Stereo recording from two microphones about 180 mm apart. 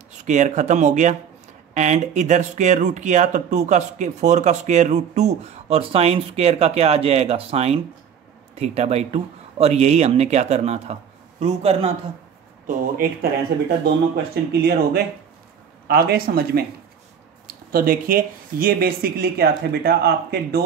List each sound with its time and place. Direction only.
0.2 s speech: 40° right (ahead or behind)
12.6 s speech: 50° right (ahead or behind)
14.1 s speech: 65° right (ahead or behind)